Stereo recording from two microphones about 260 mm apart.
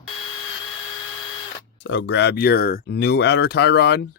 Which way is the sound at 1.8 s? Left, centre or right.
Left.